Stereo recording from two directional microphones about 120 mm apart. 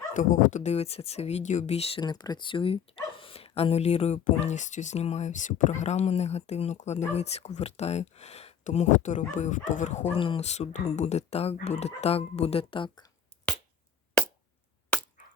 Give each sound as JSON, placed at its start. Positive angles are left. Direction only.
{"t": 0.1, "sound": "speech", "side_deg": 90}
{"t": 2.0, "sound": "speech", "side_deg": 35}
{"t": 10.2, "sound": "speech", "side_deg": 45}
{"t": 10.4, "sound": "speech", "side_deg": 65}